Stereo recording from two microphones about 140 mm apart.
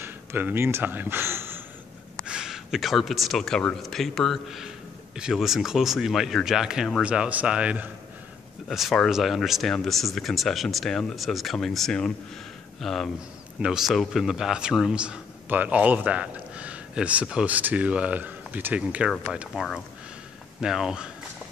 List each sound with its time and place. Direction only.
0.0 s speech: 15° right (ahead or behind)
2.2 s a man's voice: 5° right (ahead or behind)